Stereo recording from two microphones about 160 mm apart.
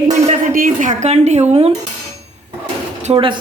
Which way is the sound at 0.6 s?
55° right (ahead or behind).